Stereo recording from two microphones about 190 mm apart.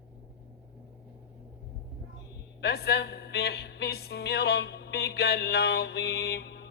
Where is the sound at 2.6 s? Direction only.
55° left (ahead or behind).